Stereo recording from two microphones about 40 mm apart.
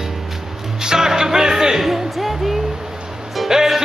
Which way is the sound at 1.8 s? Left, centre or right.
Centre.